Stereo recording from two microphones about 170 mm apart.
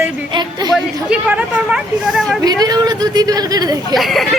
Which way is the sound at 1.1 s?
5° right (ahead or behind).